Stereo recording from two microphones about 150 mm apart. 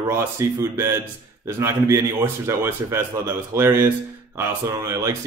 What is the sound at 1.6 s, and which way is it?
A man's voice, 20° right (ahead or behind).